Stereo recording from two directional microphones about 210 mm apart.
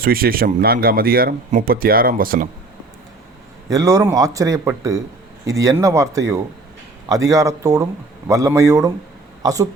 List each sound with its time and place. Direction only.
0.0 s speech: 45° right (ahead or behind)
3.7 s speech: 15° right (ahead or behind)